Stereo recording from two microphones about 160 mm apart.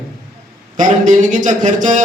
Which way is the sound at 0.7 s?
55° right (ahead or behind).